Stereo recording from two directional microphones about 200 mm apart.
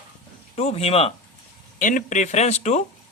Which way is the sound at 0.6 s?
30° left (ahead or behind).